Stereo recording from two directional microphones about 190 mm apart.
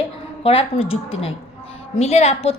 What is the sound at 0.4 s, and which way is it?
A woman's voice, 30° left (ahead or behind).